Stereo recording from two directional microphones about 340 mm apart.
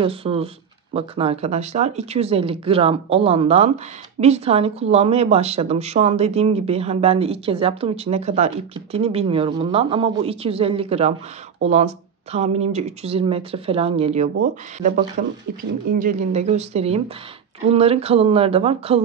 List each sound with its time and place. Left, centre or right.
0.0 s speech: centre